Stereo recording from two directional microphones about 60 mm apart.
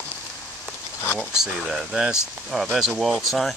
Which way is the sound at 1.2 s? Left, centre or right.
Centre.